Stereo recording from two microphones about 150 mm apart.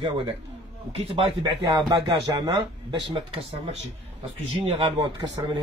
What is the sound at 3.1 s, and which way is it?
A man's voice, 35° right (ahead or behind).